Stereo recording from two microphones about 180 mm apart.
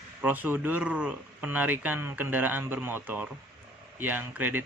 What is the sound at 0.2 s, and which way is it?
A man's voice, 10° right (ahead or behind).